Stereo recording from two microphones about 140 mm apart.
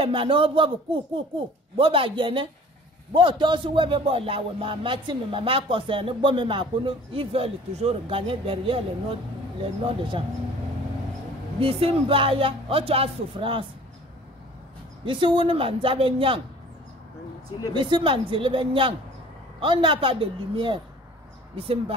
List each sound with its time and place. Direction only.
0.0 s speech: 40° right (ahead or behind)
1.8 s speech: 40° right (ahead or behind)
11.6 s speech: 45° right (ahead or behind)
15.0 s speech: 35° right (ahead or behind)
17.7 s speech: 35° right (ahead or behind)